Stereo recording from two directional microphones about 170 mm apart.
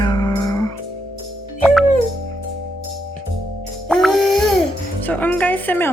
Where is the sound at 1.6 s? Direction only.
Centre (ahead or behind).